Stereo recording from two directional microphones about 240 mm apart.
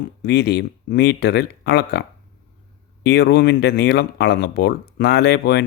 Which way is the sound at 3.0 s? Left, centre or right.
Left.